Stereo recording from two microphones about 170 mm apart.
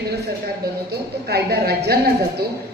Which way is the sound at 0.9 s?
70° right (ahead or behind).